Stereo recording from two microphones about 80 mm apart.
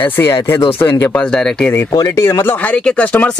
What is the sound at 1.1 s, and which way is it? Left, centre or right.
Speech, centre.